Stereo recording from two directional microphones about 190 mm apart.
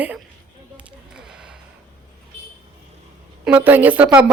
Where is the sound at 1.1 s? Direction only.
5° right (ahead or behind).